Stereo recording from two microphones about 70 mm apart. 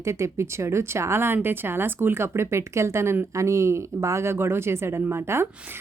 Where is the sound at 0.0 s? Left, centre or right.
Right.